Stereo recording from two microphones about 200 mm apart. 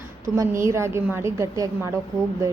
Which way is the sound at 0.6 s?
15° right (ahead or behind).